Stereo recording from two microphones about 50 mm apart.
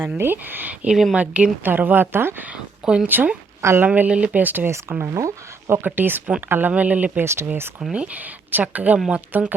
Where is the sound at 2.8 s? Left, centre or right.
Centre.